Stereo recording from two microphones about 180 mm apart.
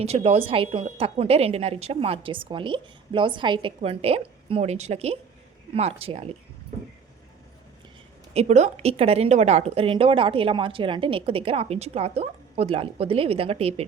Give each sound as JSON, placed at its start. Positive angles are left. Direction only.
{"t": 0.0, "sound": "speech", "side_deg": -35}
{"t": 8.3, "sound": "speech", "side_deg": -35}